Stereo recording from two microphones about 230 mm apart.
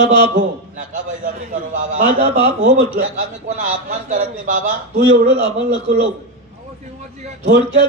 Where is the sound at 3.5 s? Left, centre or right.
Right.